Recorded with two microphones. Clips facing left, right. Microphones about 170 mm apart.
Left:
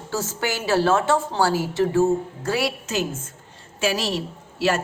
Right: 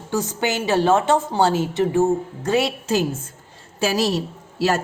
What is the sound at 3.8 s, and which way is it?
Speech, 40° right (ahead or behind).